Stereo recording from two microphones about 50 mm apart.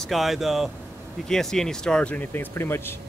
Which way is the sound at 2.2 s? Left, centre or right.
Left.